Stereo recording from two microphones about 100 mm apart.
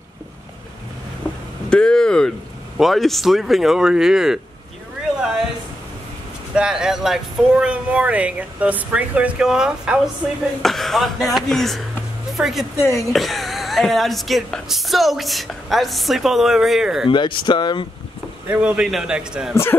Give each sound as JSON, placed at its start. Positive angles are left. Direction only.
{"t": 1.7, "sound": "speech", "side_deg": 10}
{"t": 5.1, "sound": "a sound", "side_deg": -5}
{"t": 6.5, "sound": "speech", "side_deg": -5}
{"t": 17.1, "sound": "speech", "side_deg": 50}
{"t": 18.5, "sound": "speech", "side_deg": -10}
{"t": 19.5, "sound": "speech", "side_deg": 25}